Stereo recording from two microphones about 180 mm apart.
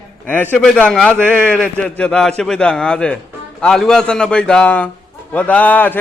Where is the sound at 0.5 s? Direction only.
5° left (ahead or behind).